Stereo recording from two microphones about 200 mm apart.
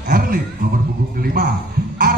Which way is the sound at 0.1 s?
45° right (ahead or behind).